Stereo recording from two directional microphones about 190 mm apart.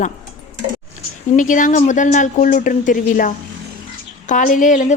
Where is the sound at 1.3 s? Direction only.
40° left (ahead or behind).